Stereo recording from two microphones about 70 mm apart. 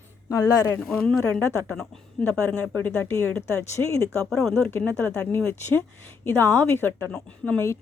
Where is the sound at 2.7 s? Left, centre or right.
Left.